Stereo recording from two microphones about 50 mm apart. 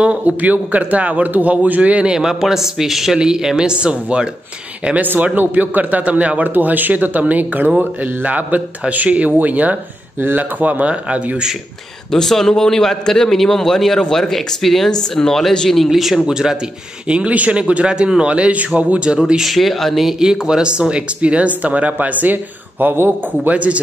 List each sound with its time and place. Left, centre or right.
0.0 s speech: right
2.0 s speech: centre
5.2 s speech: right
12.1 s a man's voice: centre
15.9 s speech: centre
16.3 s speech: centre
17.1 s speech: right
19.5 s speech: centre; by 23.8 s right